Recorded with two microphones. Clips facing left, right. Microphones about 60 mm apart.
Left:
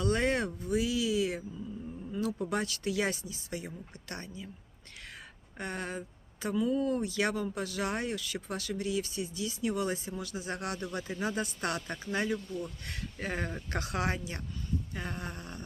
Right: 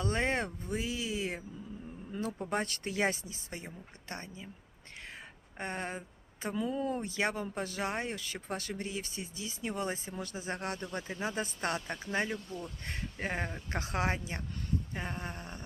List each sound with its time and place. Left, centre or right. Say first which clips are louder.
0.0 s speech: left 3 dB; right
5.5 s speech: left 1 dB; right